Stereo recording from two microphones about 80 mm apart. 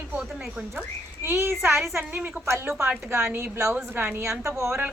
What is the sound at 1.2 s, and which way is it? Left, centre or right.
Speech, right.